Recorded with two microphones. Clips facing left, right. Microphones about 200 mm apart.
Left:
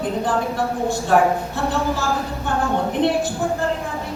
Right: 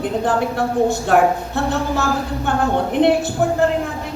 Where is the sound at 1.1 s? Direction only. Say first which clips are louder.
Right 1 dB; 65° right (ahead or behind).